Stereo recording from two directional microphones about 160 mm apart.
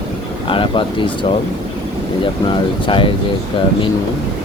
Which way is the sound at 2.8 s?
30° left (ahead or behind).